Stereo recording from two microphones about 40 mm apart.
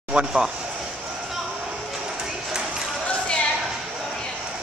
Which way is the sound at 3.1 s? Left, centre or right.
Left.